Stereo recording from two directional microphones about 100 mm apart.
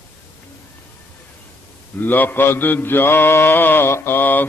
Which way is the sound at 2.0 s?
20° left (ahead or behind).